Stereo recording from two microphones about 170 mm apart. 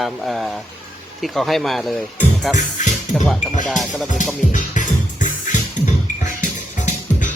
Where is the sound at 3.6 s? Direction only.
Centre (ahead or behind).